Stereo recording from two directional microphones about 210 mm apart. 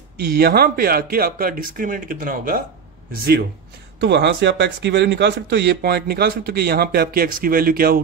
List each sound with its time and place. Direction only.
0.2 s speech: 50° right (ahead or behind)
4.0 s speech: 55° right (ahead or behind)